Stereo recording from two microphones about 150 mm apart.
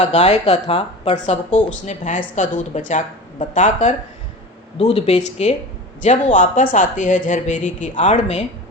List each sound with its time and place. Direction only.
0.0 s speech: 50° left (ahead or behind)